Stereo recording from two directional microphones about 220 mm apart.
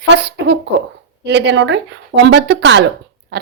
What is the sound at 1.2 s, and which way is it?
Speech, 55° right (ahead or behind).